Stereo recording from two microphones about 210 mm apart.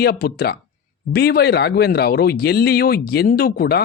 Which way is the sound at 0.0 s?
45° left (ahead or behind).